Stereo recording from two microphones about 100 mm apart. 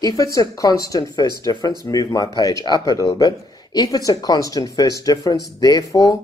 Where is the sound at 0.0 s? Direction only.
40° left (ahead or behind).